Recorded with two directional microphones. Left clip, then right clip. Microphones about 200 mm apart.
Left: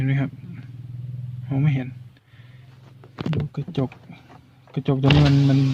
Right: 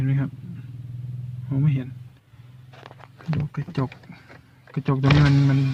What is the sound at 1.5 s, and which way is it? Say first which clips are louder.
Speech: left 2 dB; centre (ahead or behind).